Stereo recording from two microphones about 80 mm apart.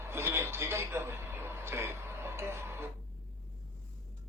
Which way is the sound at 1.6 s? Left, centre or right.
Right.